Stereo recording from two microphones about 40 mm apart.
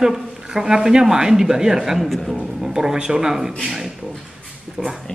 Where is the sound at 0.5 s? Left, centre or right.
Centre.